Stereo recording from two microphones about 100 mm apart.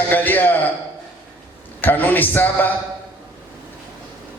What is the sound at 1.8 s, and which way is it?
Speech, 20° left (ahead or behind).